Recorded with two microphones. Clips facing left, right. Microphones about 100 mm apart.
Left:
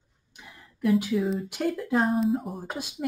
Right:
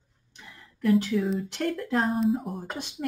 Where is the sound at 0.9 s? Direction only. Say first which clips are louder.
Right 1 dB; 10° left (ahead or behind).